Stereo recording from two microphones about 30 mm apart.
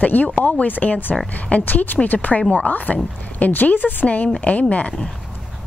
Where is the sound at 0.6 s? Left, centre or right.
Left.